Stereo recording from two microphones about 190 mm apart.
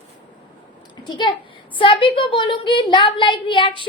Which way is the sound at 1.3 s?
25° left (ahead or behind).